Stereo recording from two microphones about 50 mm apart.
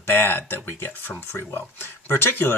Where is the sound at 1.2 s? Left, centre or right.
Left.